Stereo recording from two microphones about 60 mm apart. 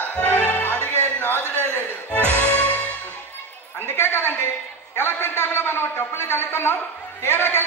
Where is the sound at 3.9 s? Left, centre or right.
Left.